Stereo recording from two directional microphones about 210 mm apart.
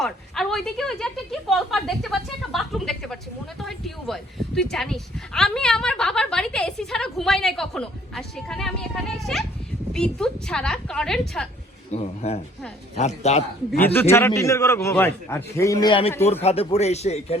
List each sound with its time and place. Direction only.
0.0 s a woman's voice: centre (ahead or behind)
11.9 s a man's voice: 30° left (ahead or behind)
13.7 s a man's voice: 10° left (ahead or behind); by 17.3 s 30° left (ahead or behind)